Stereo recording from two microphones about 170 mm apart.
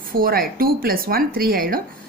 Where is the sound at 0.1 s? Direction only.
60° right (ahead or behind).